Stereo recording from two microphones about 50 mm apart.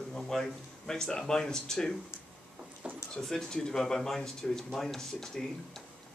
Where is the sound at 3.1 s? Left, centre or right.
Centre.